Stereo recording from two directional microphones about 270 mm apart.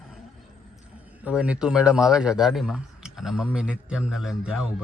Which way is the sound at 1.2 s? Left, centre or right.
Centre.